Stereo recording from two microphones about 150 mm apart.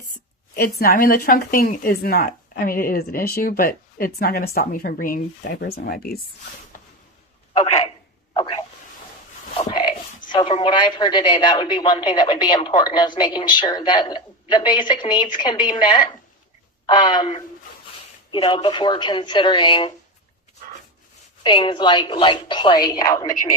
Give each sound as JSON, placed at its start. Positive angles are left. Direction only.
{"t": 0.8, "sound": "a woman's voice", "side_deg": 85}
{"t": 6.7, "sound": "train", "side_deg": 65}
{"t": 8.3, "sound": "a sound", "side_deg": 35}
{"t": 10.3, "sound": "a woman's voice", "side_deg": 35}
{"t": 21.4, "sound": "a woman's voice", "side_deg": 30}